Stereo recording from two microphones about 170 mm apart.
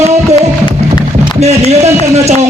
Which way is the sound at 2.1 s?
40° right (ahead or behind).